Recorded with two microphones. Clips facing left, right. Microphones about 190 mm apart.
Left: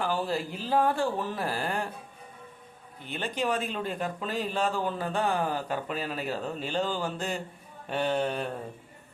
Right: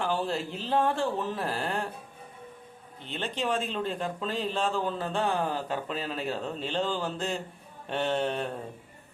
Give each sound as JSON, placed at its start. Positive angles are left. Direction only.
{"t": 0.0, "sound": "speech", "side_deg": 5}
{"t": 3.0, "sound": "speech", "side_deg": 10}